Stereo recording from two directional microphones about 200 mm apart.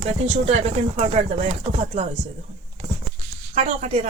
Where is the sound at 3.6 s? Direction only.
35° right (ahead or behind).